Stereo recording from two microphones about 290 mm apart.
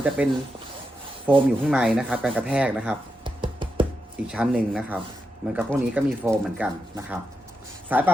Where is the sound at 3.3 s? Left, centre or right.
Centre.